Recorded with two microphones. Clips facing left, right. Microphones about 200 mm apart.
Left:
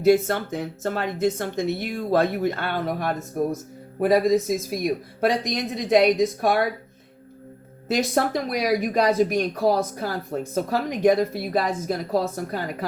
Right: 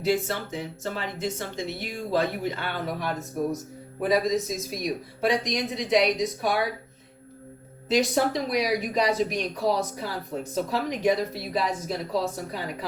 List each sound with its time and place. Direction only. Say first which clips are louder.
0.0 s speech: left 7 dB; 55° left (ahead or behind)
7.9 s speech: even; 50° left (ahead or behind)